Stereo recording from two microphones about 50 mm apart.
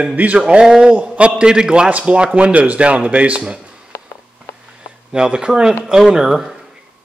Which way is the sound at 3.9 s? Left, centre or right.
Left.